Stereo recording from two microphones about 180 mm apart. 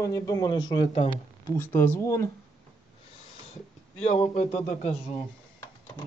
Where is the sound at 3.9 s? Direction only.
35° left (ahead or behind).